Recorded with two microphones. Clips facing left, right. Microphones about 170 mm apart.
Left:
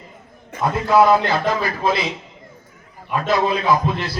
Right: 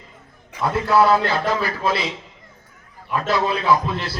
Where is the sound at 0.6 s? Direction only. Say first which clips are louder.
Left 2 dB; 15° left (ahead or behind).